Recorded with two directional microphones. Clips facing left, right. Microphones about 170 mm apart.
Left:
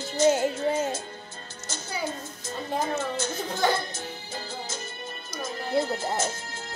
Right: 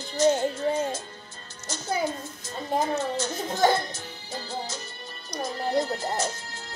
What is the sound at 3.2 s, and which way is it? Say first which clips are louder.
Speech: right 3 dB; 40° right (ahead or behind).